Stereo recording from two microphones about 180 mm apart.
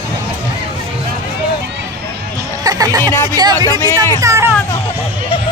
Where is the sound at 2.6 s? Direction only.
20° right (ahead or behind).